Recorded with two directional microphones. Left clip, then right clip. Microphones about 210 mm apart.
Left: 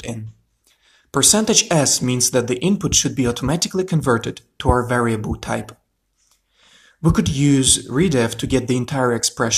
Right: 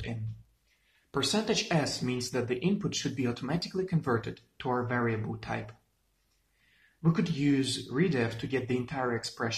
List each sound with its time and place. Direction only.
1.1 s speech: 45° left (ahead or behind)
7.0 s speech: 45° left (ahead or behind)